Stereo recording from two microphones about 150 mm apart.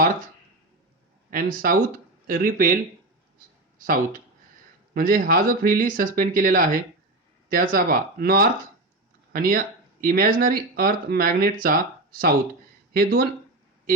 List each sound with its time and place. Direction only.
1.3 s speech: 70° right (ahead or behind)
3.8 s speech: 65° right (ahead or behind); by 8.4 s 90° right
9.3 s speech: 65° right (ahead or behind)
12.9 s speech: 90° right